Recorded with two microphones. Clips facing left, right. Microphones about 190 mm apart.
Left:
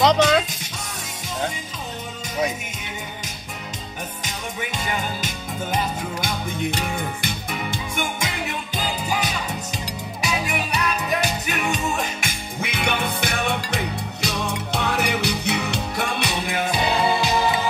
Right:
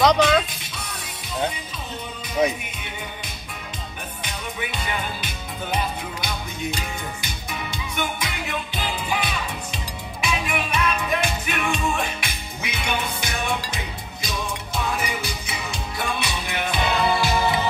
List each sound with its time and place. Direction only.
0.0 s music: centre (ahead or behind)
0.5 s music: 45° left (ahead or behind)
4.2 s music: 45° left (ahead or behind)
6.8 s music: 55° left (ahead or behind)
14.2 s music: 70° left (ahead or behind)
16.5 s music: 35° left (ahead or behind); by 17.6 s 20° left (ahead or behind)